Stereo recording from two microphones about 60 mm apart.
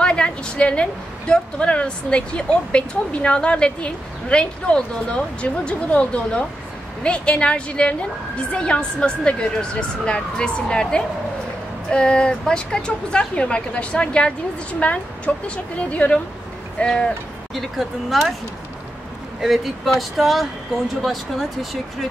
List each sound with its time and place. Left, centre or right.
0.0 s a woman's voice: centre
17.6 s speech: centre
19.4 s speech: centre